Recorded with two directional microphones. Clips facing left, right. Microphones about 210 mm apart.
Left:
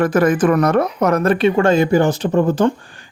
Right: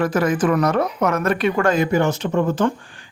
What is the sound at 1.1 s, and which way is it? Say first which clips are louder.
Speech: left 5 dB; 30° left (ahead or behind).